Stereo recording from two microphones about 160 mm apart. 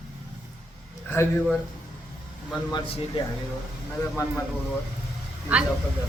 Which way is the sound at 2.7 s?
30° left (ahead or behind).